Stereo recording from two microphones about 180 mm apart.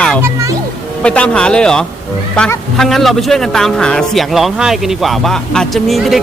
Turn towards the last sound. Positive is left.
turn(degrees=0)  # may be behind; listen again after turning